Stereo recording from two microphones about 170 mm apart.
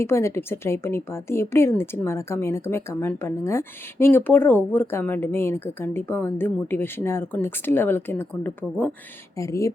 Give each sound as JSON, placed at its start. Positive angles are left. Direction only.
{"t": 0.0, "sound": "speech", "side_deg": 15}